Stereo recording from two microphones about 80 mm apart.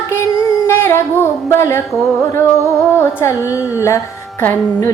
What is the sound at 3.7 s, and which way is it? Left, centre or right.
Speech, left.